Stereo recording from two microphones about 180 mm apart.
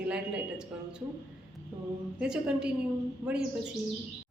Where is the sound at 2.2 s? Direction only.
5° right (ahead or behind).